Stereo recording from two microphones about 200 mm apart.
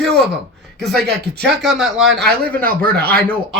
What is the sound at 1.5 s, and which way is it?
Speech, centre (ahead or behind).